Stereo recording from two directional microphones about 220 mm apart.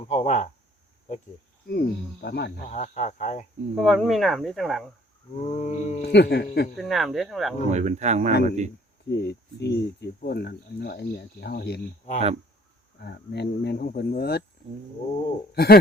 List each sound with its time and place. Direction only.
0.1 s speech: 30° left (ahead or behind)
1.6 s speech: 45° left (ahead or behind)
2.6 s speech: 30° left (ahead or behind)
3.8 s speech: centre (ahead or behind)
5.4 s speech: 30° left (ahead or behind)
6.0 s speech: 50° left (ahead or behind)
6.7 s speech: centre (ahead or behind)
7.7 s speech: 30° right (ahead or behind)
9.0 s speech: 50° left (ahead or behind)
15.5 s speech: 45° left (ahead or behind)